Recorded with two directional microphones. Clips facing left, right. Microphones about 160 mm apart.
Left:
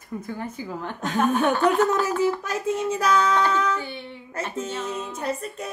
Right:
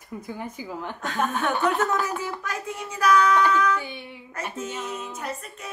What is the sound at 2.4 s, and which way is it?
Child singing, 25° left (ahead or behind).